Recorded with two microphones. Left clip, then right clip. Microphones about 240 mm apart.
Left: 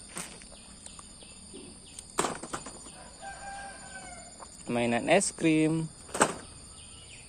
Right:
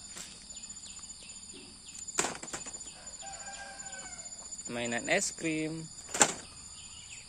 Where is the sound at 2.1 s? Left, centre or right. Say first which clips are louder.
Left 3 dB; centre.